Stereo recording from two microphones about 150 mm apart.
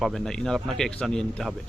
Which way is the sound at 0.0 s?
5° left (ahead or behind).